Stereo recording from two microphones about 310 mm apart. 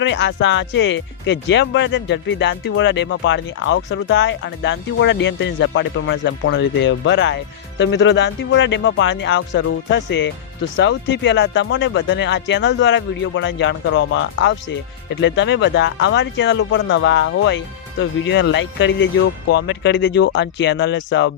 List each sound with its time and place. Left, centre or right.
0.0 s speech: left